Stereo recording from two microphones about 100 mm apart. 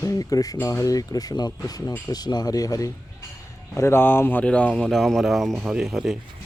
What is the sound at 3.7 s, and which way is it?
Speech, 25° left (ahead or behind).